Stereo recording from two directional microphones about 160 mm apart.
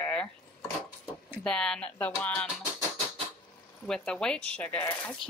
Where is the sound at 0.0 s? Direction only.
5° left (ahead or behind).